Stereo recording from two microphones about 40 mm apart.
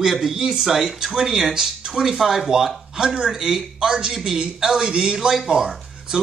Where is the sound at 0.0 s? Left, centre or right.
Centre.